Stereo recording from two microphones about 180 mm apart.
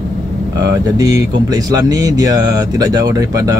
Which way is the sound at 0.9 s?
20° right (ahead or behind).